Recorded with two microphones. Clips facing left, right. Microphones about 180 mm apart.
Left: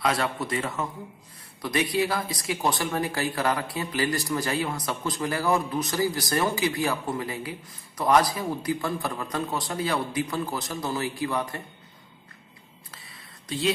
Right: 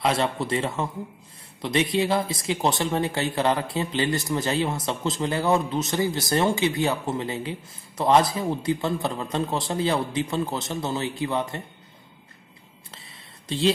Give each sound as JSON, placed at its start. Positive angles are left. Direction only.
{"t": 0.0, "sound": "speech", "side_deg": -25}